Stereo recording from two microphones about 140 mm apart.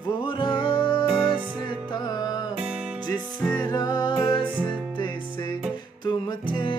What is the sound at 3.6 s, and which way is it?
Music, 30° left (ahead or behind).